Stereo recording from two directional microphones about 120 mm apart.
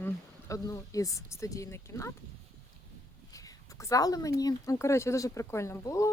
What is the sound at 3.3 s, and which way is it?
Speech, 30° left (ahead or behind).